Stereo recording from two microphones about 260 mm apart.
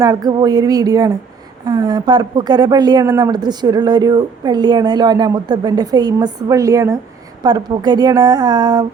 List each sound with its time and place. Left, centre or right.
0.0 s speech: centre